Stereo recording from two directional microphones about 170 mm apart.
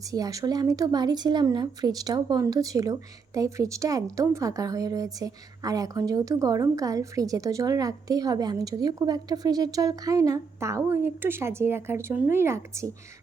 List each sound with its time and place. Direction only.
0.0 s speech: 20° right (ahead or behind)